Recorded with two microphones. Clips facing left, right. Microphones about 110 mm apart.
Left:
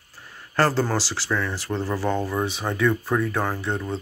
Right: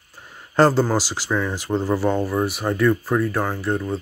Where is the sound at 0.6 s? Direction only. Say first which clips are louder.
Right 5 dB; 15° right (ahead or behind).